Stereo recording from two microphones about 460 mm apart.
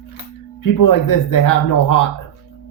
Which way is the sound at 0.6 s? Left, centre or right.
Left.